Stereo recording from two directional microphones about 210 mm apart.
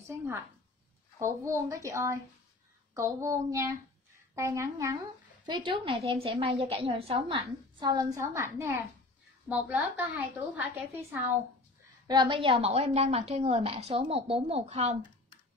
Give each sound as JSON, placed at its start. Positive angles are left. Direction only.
{"t": 1.2, "sound": "a woman's voice", "side_deg": -15}
{"t": 12.1, "sound": "a woman's voice", "side_deg": -25}